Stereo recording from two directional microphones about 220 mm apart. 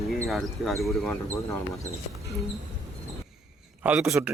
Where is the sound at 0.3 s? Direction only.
Centre (ahead or behind).